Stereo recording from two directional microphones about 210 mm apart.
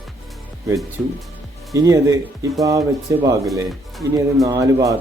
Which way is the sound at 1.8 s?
15° right (ahead or behind).